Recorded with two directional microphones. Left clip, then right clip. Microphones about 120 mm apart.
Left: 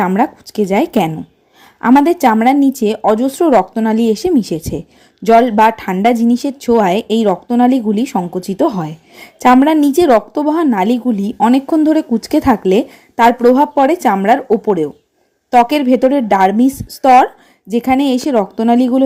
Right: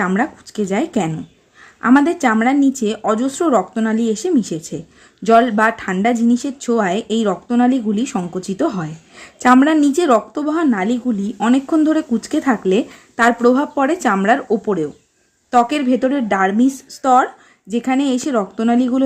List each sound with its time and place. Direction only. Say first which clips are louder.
0.2 s a woman's voice: left 6 dB; 25° left (ahead or behind)